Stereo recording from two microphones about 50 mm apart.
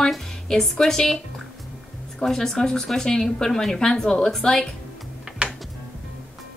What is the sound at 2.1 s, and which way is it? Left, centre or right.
Speech, centre.